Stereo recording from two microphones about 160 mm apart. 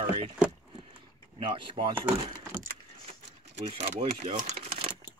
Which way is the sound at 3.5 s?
40° right (ahead or behind).